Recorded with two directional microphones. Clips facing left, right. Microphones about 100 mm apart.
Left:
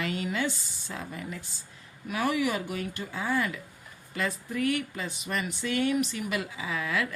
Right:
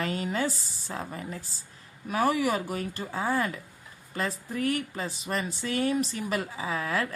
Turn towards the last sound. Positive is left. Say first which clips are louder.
# right 1 dB
turn(degrees=-35)  # may be behind; listen again after turning